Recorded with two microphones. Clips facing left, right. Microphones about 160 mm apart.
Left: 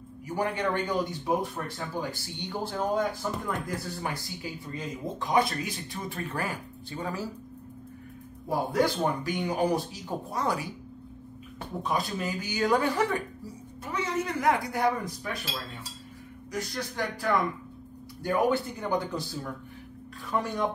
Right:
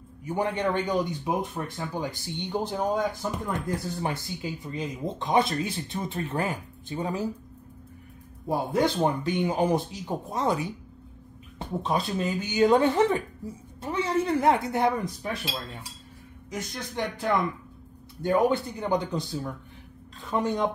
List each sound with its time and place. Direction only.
0.2 s speech: 20° right (ahead or behind)
8.5 s speech: 25° right (ahead or behind)
11.8 s speech: 25° right (ahead or behind)
16.5 s speech: 20° right (ahead or behind)